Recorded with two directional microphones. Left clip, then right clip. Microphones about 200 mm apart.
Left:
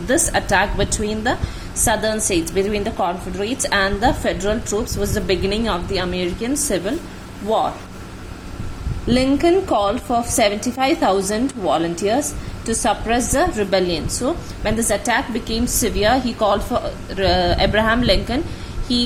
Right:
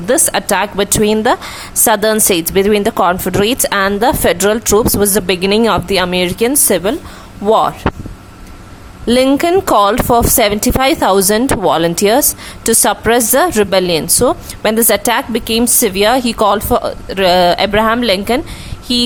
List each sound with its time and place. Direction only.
0.1 s a woman's voice: 35° right (ahead or behind)
9.0 s a woman's voice: 35° right (ahead or behind)